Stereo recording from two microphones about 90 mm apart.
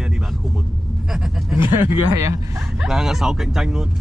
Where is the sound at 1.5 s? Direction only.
25° right (ahead or behind).